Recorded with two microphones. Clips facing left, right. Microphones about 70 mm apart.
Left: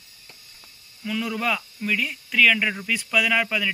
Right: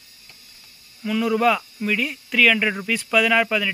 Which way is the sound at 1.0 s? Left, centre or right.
Centre.